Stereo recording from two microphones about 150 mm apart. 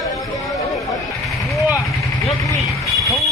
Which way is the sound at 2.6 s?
Centre (ahead or behind).